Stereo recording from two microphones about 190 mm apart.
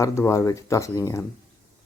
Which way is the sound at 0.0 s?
15° left (ahead or behind).